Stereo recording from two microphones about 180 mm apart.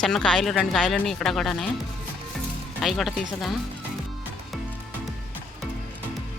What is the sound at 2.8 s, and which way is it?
Speech, centre (ahead or behind).